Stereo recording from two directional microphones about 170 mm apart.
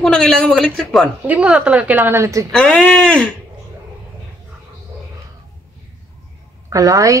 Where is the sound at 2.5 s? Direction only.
5° left (ahead or behind).